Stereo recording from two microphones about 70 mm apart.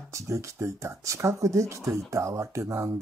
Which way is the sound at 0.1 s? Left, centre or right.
Right.